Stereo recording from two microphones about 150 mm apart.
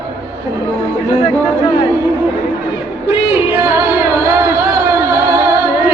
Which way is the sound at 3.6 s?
20° right (ahead or behind).